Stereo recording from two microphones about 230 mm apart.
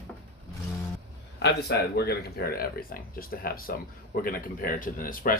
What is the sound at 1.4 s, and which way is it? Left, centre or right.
Speech, left.